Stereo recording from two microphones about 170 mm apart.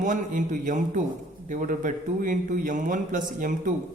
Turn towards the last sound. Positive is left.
turn(degrees=-50)  # may be behind; listen again after turning